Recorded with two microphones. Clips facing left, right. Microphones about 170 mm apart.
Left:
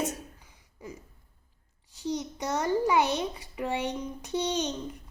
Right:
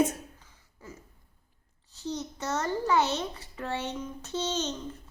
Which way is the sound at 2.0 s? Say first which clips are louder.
Left 3 dB; 15° left (ahead or behind).